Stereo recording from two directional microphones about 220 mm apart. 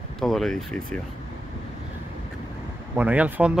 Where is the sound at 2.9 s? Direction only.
5° right (ahead or behind).